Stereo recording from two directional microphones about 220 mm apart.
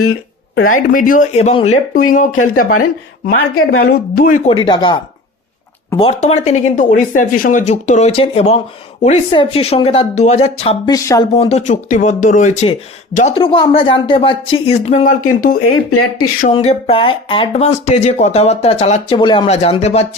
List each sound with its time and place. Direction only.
0.0 s a sound: 70° left (ahead or behind)
0.7 s speech: 40° left (ahead or behind)
3.3 s speech: 75° left (ahead or behind)
4.4 s speech: 25° left (ahead or behind)
6.0 s speech: 30° left (ahead or behind)
11.3 s speech: 30° left (ahead or behind)
15.6 s speech: 80° left
16.5 s speech: 25° left (ahead or behind)